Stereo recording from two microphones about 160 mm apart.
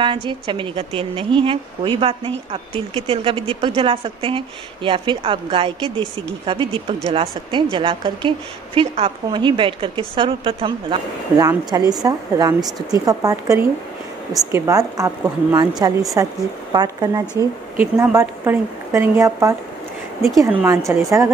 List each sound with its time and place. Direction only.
0.0 s a woman's voice: 30° right (ahead or behind)
11.3 s a woman's voice: 20° right (ahead or behind)
17.4 s a woman's voice: 15° right (ahead or behind)